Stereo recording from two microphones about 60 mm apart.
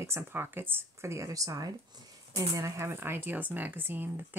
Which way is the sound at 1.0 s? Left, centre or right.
Right.